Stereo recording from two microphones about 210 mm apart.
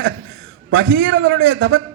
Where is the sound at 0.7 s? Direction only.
55° right (ahead or behind).